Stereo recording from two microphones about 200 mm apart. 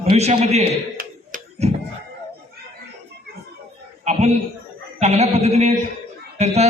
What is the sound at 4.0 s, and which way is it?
A man's voice, 35° right (ahead or behind).